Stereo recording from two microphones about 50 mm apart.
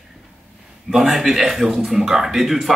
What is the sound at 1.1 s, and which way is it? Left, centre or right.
A man's voice, centre.